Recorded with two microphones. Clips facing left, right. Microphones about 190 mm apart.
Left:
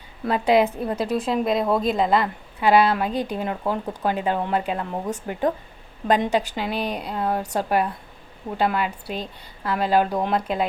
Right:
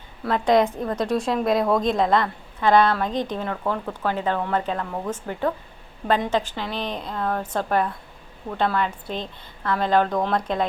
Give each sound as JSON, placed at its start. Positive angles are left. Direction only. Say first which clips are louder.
{"t": 0.3, "sound": "a woman's voice", "louder": "even", "side_deg": 10}